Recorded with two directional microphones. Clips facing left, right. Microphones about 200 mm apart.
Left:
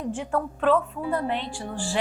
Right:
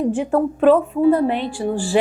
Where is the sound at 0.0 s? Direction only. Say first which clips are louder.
Right 9 dB; 10° right (ahead or behind).